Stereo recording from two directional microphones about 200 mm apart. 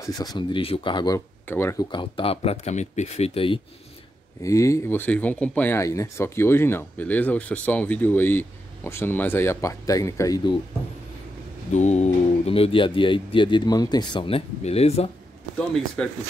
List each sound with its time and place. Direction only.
0.0 s speech: 20° left (ahead or behind)
4.4 s speech: 15° left (ahead or behind)
11.7 s speech: 35° left (ahead or behind)
15.5 s speech: 5° left (ahead or behind)